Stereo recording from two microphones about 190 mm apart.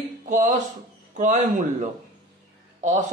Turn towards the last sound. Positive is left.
turn(degrees=-40)  # may be behind; listen again after turning